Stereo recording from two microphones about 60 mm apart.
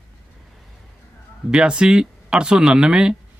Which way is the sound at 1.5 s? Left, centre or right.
Centre.